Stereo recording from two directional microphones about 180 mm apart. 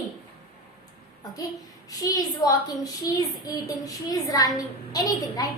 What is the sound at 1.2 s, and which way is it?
A child's voice, 20° left (ahead or behind).